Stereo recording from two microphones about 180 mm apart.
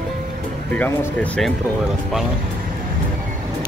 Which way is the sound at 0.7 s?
10° left (ahead or behind).